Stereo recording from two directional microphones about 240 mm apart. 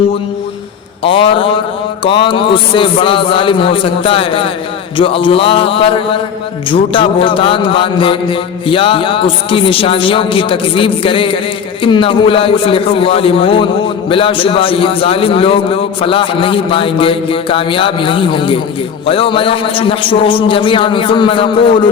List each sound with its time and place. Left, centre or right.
1.0 s mantra: left